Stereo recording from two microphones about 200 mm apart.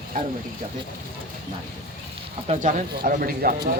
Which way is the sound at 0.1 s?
45° right (ahead or behind).